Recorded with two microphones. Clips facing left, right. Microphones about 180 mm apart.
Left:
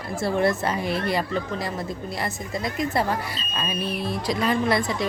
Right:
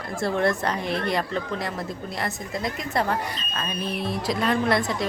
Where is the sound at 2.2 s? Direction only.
Centre (ahead or behind).